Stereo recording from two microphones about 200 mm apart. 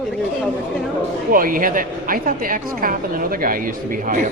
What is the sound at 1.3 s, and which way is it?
A woman's voice, 45° right (ahead or behind).